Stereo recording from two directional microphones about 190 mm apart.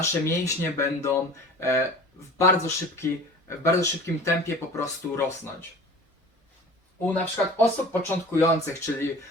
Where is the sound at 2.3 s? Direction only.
15° left (ahead or behind).